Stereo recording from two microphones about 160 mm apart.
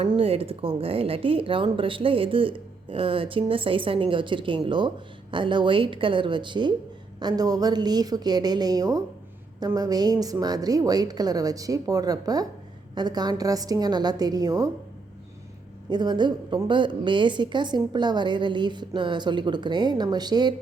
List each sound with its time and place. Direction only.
0.2 s a woman's voice: 40° right (ahead or behind)
15.9 s a woman's voice: 25° right (ahead or behind)